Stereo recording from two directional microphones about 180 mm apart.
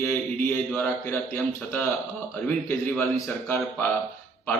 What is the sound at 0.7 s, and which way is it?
A man's voice, 10° left (ahead or behind).